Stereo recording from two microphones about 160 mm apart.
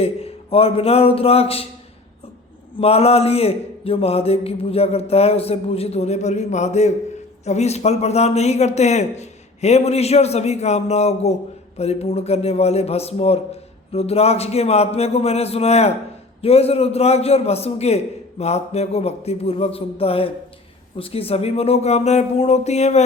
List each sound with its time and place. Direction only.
0.0 s speech: 40° left (ahead or behind)
2.7 s a man's voice: 40° left (ahead or behind)